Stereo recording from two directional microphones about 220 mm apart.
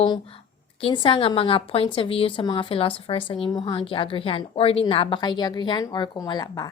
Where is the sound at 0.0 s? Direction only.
25° left (ahead or behind).